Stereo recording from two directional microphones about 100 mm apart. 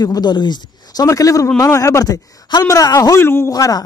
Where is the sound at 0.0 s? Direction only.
45° left (ahead or behind); by 3.5 s 25° left (ahead or behind).